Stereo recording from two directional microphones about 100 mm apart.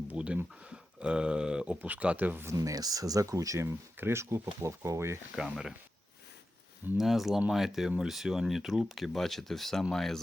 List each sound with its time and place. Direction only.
0.1 s speech: 15° right (ahead or behind)
2.6 s speech: 40° right (ahead or behind)
5.4 s speech: 5° right (ahead or behind)
6.9 s speech: 5° right (ahead or behind)